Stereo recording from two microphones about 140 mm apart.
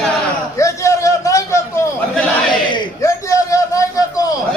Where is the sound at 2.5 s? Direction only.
35° left (ahead or behind).